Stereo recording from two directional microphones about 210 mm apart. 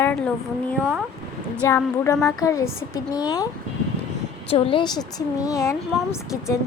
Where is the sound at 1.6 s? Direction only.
15° left (ahead or behind).